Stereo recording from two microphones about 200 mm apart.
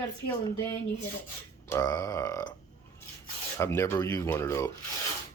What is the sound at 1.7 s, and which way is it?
Speech, 15° left (ahead or behind).